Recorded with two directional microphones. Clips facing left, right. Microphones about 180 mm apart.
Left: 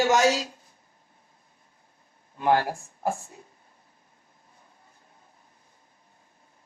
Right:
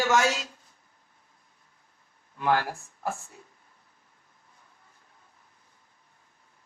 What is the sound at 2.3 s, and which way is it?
A man's voice, 20° left (ahead or behind).